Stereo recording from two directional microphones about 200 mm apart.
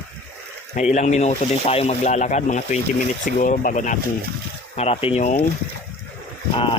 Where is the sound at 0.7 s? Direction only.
35° left (ahead or behind).